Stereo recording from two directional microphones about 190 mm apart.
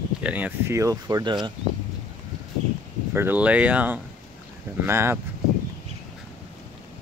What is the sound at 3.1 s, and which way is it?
Speech, 10° right (ahead or behind).